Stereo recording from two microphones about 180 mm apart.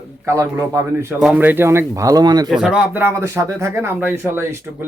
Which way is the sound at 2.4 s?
5° right (ahead or behind).